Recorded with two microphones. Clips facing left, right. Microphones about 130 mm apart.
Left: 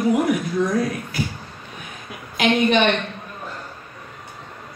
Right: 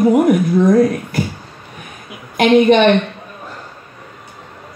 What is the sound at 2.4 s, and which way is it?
Speech, 55° right (ahead or behind).